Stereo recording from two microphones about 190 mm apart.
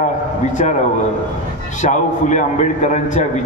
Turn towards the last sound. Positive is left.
turn(degrees=40)  # may be behind; listen again after turning